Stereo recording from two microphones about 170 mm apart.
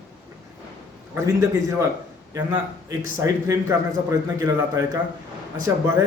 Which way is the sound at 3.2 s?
15° right (ahead or behind).